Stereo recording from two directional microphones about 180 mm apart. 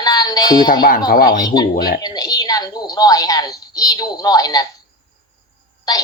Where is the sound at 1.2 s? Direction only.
20° left (ahead or behind).